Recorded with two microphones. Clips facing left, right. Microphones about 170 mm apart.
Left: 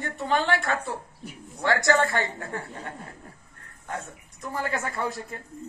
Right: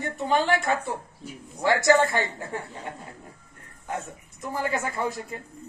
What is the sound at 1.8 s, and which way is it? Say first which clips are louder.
Speech: right 4 dB; 20° right (ahead or behind).